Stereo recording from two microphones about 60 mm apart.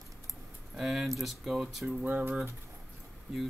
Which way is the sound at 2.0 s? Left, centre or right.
Right.